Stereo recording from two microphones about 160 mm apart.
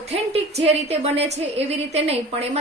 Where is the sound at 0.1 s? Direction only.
40° right (ahead or behind).